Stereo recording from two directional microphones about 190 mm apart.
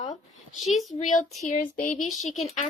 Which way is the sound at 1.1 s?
40° left (ahead or behind).